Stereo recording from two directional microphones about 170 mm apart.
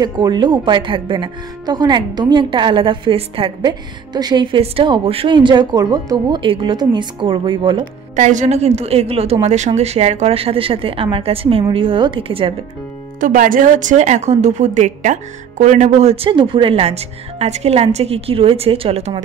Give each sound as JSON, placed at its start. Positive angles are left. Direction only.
{"t": 0.0, "sound": "speech", "side_deg": -25}
{"t": 8.2, "sound": "a woman's voice", "side_deg": -45}
{"t": 13.2, "sound": "a woman's voice", "side_deg": -55}